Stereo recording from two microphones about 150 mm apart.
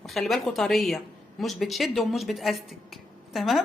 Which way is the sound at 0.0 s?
Centre (ahead or behind).